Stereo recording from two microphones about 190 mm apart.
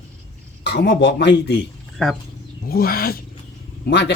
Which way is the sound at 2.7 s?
50° left (ahead or behind).